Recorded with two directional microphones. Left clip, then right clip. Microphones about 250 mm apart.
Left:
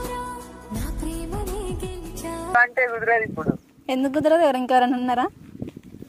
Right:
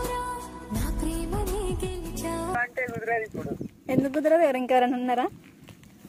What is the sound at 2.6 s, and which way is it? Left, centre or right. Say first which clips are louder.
A woman's voice: left 10 dB; left.